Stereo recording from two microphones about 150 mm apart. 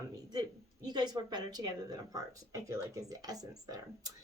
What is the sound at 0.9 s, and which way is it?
Speech, 25° right (ahead or behind).